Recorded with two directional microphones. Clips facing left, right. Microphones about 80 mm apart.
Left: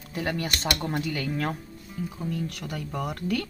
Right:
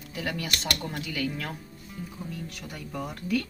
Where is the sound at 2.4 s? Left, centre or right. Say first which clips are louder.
Left 5 dB; left.